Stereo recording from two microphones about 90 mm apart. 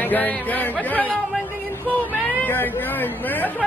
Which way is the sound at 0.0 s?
20° left (ahead or behind).